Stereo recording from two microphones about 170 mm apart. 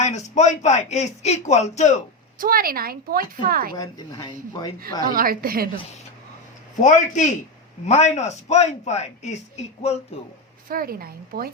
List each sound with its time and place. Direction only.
0.0 s speech: 45° left (ahead or behind)
2.4 s a woman's voice: 60° right (ahead or behind)
3.8 s speech: 20° left (ahead or behind)
4.8 s a woman's voice: 60° right (ahead or behind)
6.7 s a man's voice: 45° left (ahead or behind)
10.7 s a woman's voice: 60° right (ahead or behind)